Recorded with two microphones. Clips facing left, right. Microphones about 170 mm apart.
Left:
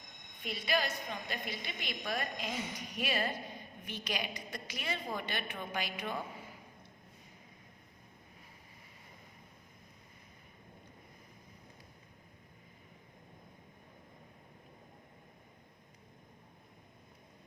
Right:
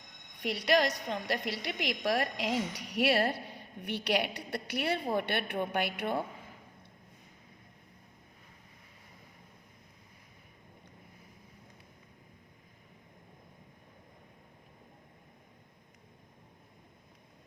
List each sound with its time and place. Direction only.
0.3 s a woman's voice: 75° right (ahead or behind)